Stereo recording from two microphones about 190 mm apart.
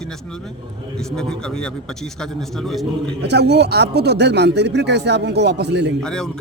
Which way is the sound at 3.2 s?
60° right (ahead or behind).